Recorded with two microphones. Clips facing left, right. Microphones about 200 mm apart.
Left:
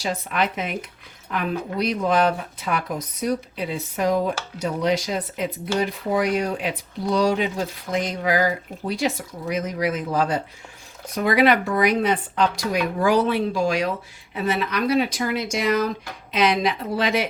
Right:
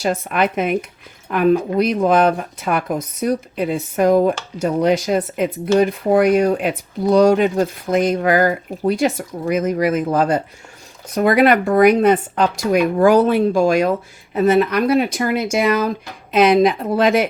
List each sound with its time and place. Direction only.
0.0 s speech: 50° right (ahead or behind)